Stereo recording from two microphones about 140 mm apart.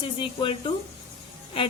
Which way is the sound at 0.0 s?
35° left (ahead or behind).